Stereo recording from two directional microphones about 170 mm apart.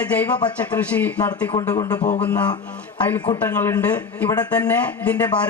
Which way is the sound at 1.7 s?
20° left (ahead or behind).